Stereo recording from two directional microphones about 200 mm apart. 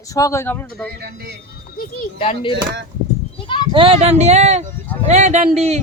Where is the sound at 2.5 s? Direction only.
60° right (ahead or behind).